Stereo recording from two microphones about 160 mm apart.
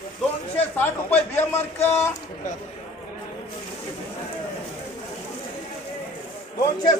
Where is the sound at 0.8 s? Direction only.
10° left (ahead or behind).